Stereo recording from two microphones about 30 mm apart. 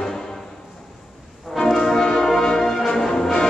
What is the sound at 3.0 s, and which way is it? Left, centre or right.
Music, centre.